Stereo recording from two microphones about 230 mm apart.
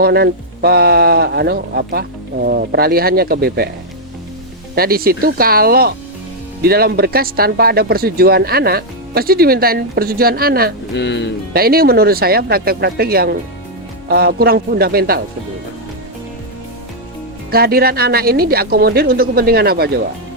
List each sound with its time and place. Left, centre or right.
0.0 s speech: right
4.7 s speech: right
10.9 s speech: left
11.5 s speech: right
17.5 s speech: right